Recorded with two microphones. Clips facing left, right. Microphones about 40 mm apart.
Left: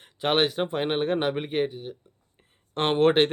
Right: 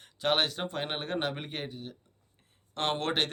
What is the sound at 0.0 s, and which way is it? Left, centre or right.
Speech, left.